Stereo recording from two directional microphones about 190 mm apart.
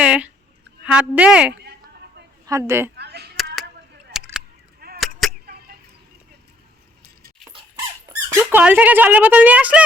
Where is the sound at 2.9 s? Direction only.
60° right (ahead or behind).